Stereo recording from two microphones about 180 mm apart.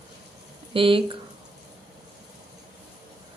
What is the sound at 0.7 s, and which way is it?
Speech, 30° right (ahead or behind).